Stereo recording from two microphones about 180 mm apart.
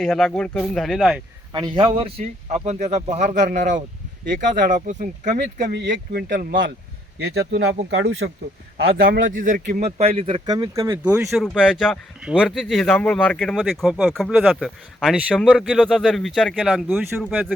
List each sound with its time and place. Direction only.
0.0 s speech: 5° left (ahead or behind)
1.5 s speech: 30° right (ahead or behind); by 6.7 s 50° right (ahead or behind)
7.2 s speech: 65° right (ahead or behind)
9.0 s speech: 55° right (ahead or behind); by 17.1 s centre (ahead or behind)